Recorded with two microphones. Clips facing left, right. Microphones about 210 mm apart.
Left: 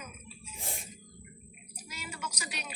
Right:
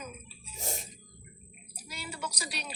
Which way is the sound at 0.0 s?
40° right (ahead or behind).